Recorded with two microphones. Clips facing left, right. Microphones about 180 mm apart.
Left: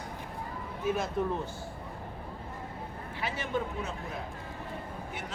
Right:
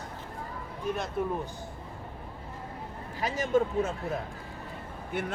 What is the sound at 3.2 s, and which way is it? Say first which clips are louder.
Speech: right 7 dB; 45° right (ahead or behind).